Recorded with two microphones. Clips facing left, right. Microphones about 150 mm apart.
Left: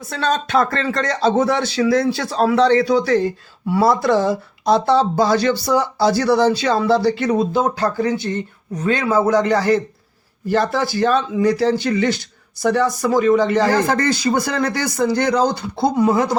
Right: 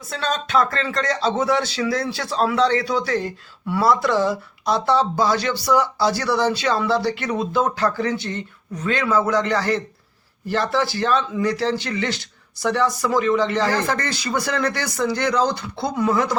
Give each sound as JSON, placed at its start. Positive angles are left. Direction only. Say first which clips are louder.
{"t": 0.3, "sound": "speech", "louder": "left 3 dB", "side_deg": 40}
{"t": 16.0, "sound": "speech", "louder": "left 3 dB", "side_deg": 25}